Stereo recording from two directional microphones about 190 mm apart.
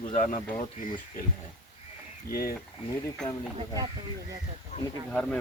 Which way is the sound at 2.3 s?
50° left (ahead or behind).